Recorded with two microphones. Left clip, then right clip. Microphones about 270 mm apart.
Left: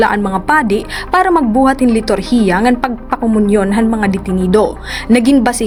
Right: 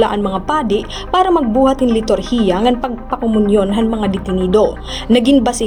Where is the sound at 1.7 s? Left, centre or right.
Left.